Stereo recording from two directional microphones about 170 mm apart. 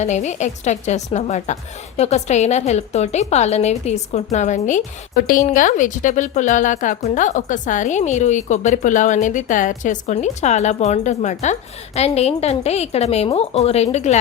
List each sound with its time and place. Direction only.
0.0 s a woman's voice: 45° left (ahead or behind)